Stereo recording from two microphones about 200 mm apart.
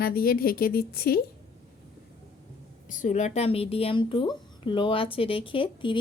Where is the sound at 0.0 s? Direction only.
50° left (ahead or behind).